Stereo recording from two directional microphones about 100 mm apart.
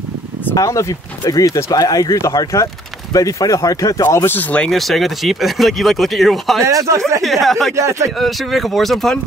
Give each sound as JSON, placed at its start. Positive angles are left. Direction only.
{"t": 0.6, "sound": "speech", "side_deg": 30}
{"t": 4.0, "sound": "speech", "side_deg": 25}
{"t": 4.6, "sound": "speech", "side_deg": 0}
{"t": 6.6, "sound": "speech", "side_deg": -35}
{"t": 7.2, "sound": "speech", "side_deg": 0}
{"t": 7.7, "sound": "speech", "side_deg": -30}
{"t": 8.2, "sound": "speech", "side_deg": 0}